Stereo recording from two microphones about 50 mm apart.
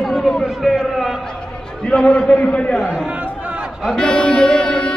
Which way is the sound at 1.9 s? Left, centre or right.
Centre.